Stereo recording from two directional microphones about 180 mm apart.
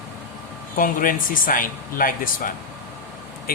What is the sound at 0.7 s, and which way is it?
Speech, 50° left (ahead or behind).